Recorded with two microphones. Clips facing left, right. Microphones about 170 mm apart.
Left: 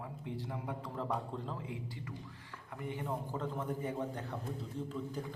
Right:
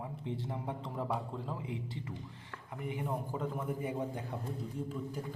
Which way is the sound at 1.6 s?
25° right (ahead or behind).